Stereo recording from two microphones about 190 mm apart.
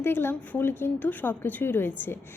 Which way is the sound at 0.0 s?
10° left (ahead or behind).